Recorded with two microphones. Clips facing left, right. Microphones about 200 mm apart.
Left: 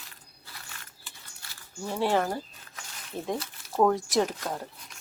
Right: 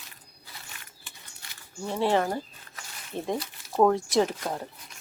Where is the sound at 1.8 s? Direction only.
Centre (ahead or behind).